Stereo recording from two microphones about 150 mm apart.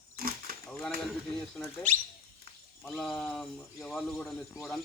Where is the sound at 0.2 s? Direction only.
65° right (ahead or behind).